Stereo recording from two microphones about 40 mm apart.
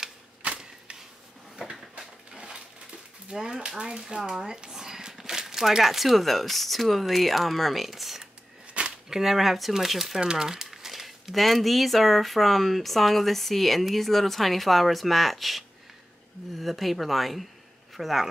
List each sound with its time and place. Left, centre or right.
2.3 s coin: centre
3.3 s speech: centre
8.8 s cap gun: right
9.1 s speech: centre